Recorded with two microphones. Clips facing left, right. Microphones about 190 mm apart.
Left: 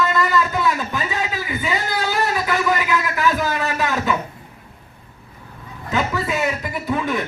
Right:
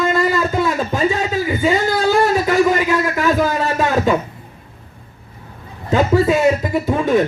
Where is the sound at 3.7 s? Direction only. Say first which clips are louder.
Right 8 dB; 30° right (ahead or behind).